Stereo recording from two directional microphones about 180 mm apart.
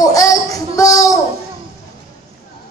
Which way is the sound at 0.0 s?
20° left (ahead or behind).